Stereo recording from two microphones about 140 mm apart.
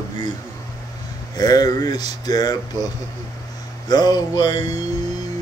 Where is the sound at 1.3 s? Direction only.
25° left (ahead or behind).